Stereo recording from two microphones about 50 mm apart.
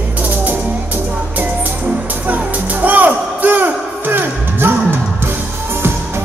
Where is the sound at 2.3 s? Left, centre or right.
Right.